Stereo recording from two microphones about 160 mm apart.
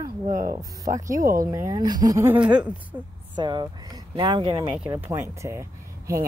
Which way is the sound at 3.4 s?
30° right (ahead or behind).